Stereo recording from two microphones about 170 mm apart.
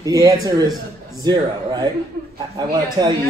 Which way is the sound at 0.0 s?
20° right (ahead or behind).